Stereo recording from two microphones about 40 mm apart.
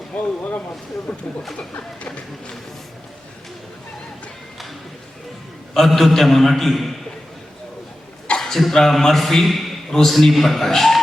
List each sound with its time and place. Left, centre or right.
0.1 s speech: left
1.1 s speech: centre
2.0 s speech: left
5.7 s a man's voice: centre
8.4 s a man's voice: centre